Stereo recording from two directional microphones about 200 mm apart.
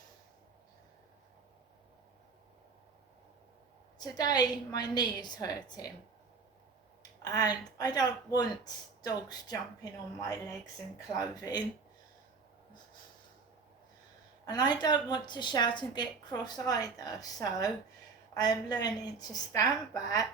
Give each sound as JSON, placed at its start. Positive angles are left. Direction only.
{"t": 3.9, "sound": "a woman's voice", "side_deg": 20}
{"t": 7.2, "sound": "a woman's voice", "side_deg": 20}
{"t": 11.2, "sound": "a woman's voice", "side_deg": 20}
{"t": 14.4, "sound": "a woman's voice", "side_deg": 20}